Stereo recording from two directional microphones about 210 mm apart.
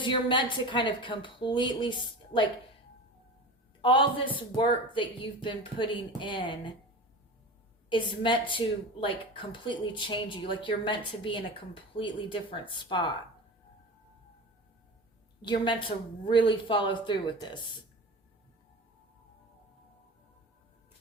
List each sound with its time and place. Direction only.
0.0 s speech: 20° left (ahead or behind)
3.8 s speech: 25° left (ahead or behind)
7.9 s speech: 25° left (ahead or behind)
15.4 s speech: 20° left (ahead or behind)